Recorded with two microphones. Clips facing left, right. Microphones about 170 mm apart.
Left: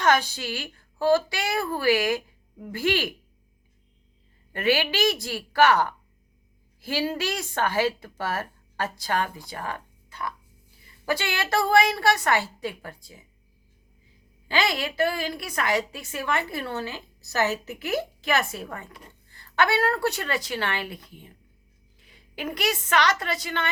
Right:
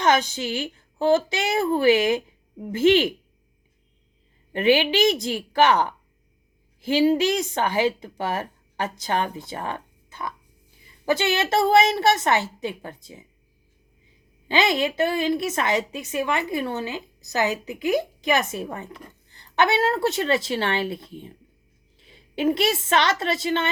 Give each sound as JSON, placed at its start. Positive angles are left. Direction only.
{"t": 0.0, "sound": "a woman's voice", "side_deg": -20}
{"t": 4.5, "sound": "a woman's voice", "side_deg": -20}
{"t": 14.4, "sound": "a woman's voice", "side_deg": -20}